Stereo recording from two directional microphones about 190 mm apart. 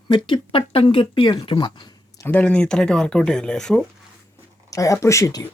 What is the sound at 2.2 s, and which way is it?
Speech, 10° left (ahead or behind).